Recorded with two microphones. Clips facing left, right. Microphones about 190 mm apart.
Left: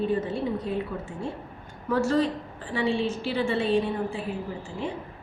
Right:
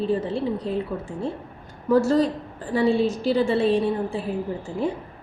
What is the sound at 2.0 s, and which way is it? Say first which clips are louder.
A woman's voice: right 4 dB; 40° right (ahead or behind).